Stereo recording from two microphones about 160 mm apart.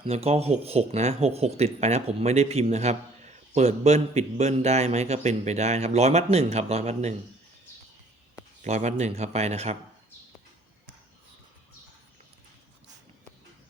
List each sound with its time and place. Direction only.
0.0 s speech: 40° right (ahead or behind)
8.6 s speech: 45° right (ahead or behind)